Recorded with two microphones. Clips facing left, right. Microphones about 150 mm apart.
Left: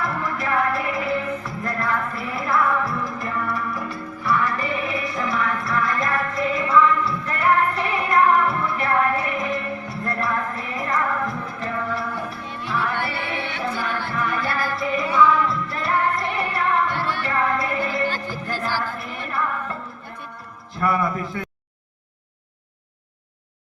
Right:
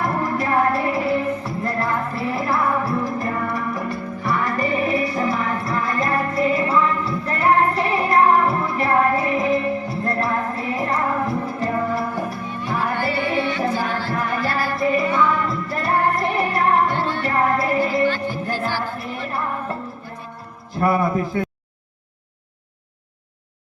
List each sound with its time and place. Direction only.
0.0 s music: 40° right (ahead or behind)
18.0 s music: 40° left (ahead or behind)
18.8 s music: 40° right (ahead or behind)
20.7 s a sound: 35° right (ahead or behind)